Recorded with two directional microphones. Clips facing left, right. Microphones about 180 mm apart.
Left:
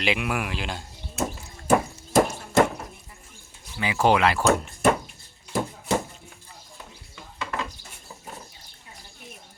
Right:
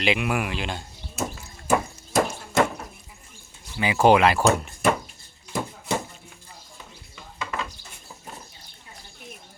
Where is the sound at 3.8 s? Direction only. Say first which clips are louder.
Right 3 dB; 15° right (ahead or behind).